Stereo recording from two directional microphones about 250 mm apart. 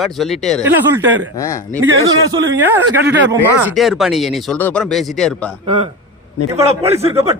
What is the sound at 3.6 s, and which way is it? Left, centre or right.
Speech, centre.